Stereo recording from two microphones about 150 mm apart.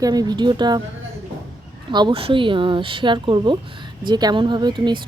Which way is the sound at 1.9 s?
30° right (ahead or behind).